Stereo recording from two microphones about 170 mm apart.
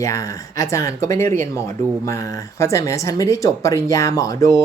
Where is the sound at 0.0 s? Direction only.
20° left (ahead or behind).